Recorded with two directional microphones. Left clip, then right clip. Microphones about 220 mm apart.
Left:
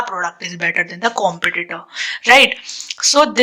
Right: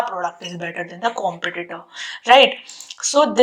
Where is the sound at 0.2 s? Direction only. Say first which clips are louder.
Left 5 dB; 15° left (ahead or behind).